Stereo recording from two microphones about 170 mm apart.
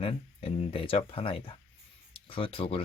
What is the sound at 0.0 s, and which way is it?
Speech, 35° left (ahead or behind).